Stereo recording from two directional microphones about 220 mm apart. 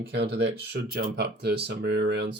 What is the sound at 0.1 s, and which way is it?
Speech, 50° right (ahead or behind).